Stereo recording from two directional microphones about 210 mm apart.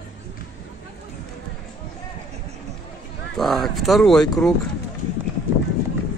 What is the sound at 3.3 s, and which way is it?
Speech, centre (ahead or behind).